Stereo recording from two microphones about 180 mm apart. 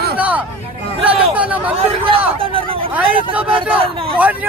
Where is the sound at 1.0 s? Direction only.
5° right (ahead or behind).